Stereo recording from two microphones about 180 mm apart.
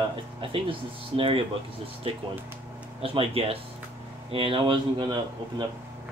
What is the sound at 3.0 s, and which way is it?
Speech, 30° right (ahead or behind).